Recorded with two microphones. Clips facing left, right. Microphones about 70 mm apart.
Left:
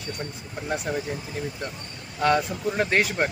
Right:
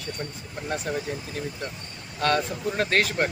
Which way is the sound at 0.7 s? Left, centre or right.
Centre.